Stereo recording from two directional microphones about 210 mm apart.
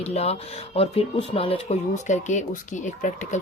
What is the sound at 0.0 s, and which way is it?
A child's voice, 30° left (ahead or behind).